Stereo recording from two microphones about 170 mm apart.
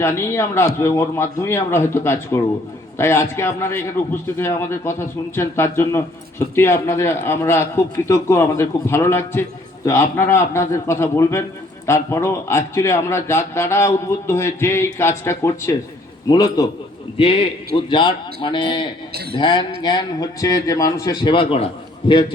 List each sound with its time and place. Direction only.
0.0 s a man's voice: 15° left (ahead or behind)
19.1 s speech: 70° right (ahead or behind)
19.4 s a man's voice: 25° left (ahead or behind)